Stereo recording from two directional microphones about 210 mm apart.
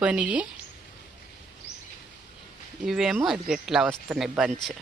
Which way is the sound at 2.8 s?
Centre (ahead or behind).